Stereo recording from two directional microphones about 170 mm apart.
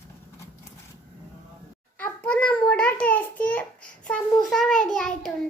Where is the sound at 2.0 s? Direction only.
10° left (ahead or behind).